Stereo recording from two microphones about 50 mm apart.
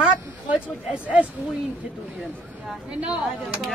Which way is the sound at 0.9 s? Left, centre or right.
Right.